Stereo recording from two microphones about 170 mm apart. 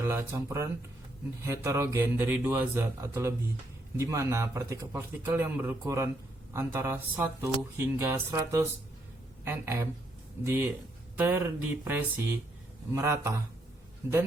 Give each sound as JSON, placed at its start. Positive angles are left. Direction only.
{"t": 0.0, "sound": "a man's voice", "side_deg": -15}